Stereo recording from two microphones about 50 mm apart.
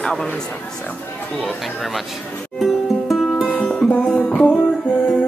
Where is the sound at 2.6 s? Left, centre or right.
Centre.